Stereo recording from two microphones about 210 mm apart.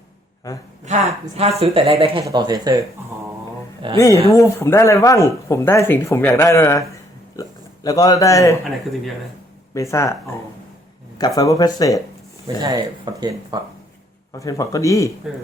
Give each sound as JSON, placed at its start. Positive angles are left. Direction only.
{"t": 0.9, "sound": "speech", "side_deg": -30}
{"t": 3.8, "sound": "speech", "side_deg": -25}
{"t": 4.3, "sound": "speech", "side_deg": 10}
{"t": 7.9, "sound": "speech", "side_deg": 15}
{"t": 9.7, "sound": "speech", "side_deg": 15}
{"t": 11.3, "sound": "speech", "side_deg": 15}
{"t": 12.5, "sound": "speech", "side_deg": -20}
{"t": 14.3, "sound": "speech", "side_deg": 15}